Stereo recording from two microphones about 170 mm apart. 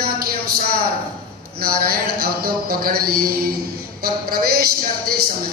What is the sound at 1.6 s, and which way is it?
Speech, 60° right (ahead or behind).